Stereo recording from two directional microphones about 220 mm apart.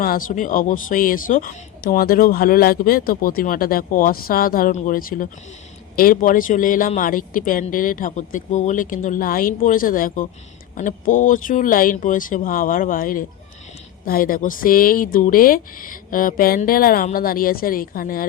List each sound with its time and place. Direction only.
0.0 s speech: 40° left (ahead or behind)